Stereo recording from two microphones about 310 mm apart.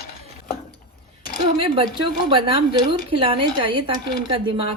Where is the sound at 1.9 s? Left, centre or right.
Centre.